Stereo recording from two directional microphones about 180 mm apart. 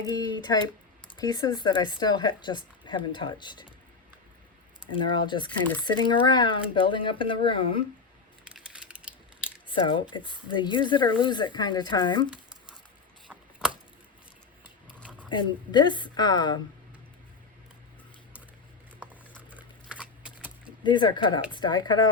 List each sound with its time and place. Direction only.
0.0 s speech: 20° left (ahead or behind)
4.9 s speech: 25° left (ahead or behind)
8.4 s a sound: 5° right (ahead or behind)
9.6 s speech: 25° left (ahead or behind)
13.2 s typewriter: 5° right (ahead or behind)
15.3 s speech: 25° left (ahead or behind)
19.5 s a sound: 5° right (ahead or behind)
20.8 s speech: 25° left (ahead or behind)